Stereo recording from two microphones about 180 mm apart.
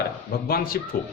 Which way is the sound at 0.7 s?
55° left (ahead or behind).